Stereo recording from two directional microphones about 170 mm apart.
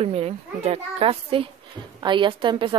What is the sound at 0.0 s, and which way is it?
A child's voice, 35° right (ahead or behind).